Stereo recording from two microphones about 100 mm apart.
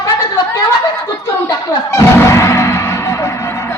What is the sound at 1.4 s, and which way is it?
Music, 30° left (ahead or behind).